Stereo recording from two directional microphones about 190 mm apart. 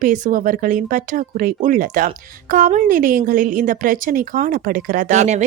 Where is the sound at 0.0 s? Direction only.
45° right (ahead or behind).